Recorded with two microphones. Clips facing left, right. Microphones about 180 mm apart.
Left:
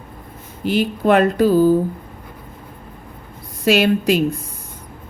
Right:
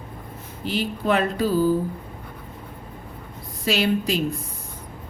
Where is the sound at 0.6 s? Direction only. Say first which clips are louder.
Left 7 dB; 60° left (ahead or behind).